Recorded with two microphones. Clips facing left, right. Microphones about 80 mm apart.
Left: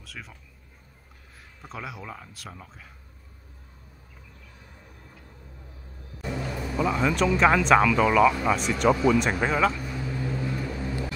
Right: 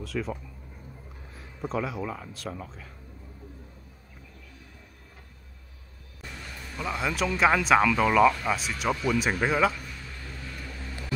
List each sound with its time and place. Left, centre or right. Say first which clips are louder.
0.0 s speech: right 11 dB; centre
1.7 s speech: right 6 dB; centre
6.8 s speech: left 5 dB; centre
9.9 s vehicle: left 12 dB; left